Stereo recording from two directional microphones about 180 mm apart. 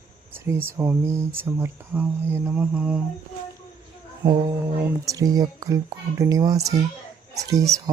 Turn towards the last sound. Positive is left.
turn(degrees=-20)  # may be behind; listen again after turning